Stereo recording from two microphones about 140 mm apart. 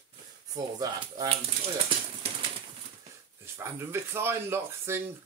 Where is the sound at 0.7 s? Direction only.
30° right (ahead or behind).